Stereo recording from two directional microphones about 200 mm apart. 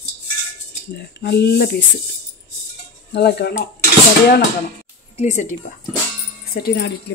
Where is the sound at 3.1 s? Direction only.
55° left (ahead or behind).